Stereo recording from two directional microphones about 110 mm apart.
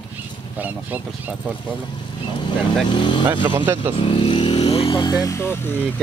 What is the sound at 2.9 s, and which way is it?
Speech, 50° left (ahead or behind).